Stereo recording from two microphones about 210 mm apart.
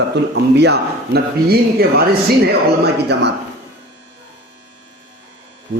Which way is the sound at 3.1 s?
55° right (ahead or behind).